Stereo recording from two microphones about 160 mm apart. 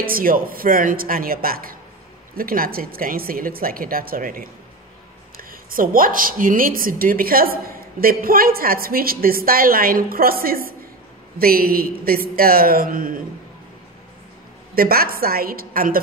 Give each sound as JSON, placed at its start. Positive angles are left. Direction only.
{"t": 0.0, "sound": "a woman's voice", "side_deg": -65}
{"t": 14.8, "sound": "a woman's voice", "side_deg": -70}